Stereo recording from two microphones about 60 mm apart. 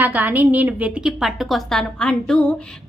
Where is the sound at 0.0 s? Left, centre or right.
Right.